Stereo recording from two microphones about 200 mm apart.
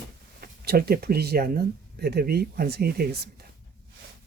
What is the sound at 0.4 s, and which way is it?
Speech, 50° right (ahead or behind).